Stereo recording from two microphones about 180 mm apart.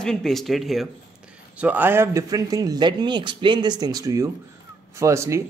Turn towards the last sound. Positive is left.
turn(degrees=-15)  # may be behind; listen again after turning